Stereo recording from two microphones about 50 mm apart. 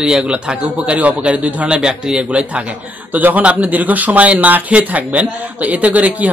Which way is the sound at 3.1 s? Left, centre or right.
Right.